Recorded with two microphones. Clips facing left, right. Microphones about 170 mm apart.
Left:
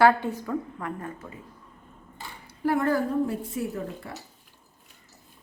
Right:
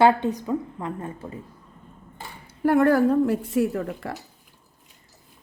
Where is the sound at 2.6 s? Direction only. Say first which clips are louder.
Right 6 dB; 60° right (ahead or behind); by 4.1 s 85° right.